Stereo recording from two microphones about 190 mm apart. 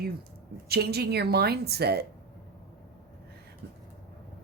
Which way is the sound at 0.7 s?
55° right (ahead or behind).